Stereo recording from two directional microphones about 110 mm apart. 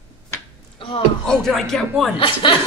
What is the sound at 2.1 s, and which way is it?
Speech, 50° left (ahead or behind).